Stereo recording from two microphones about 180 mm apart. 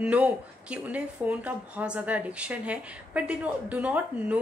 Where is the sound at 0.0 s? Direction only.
5° right (ahead or behind).